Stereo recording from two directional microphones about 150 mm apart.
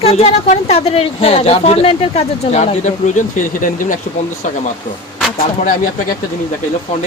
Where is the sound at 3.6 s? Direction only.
60° left (ahead or behind).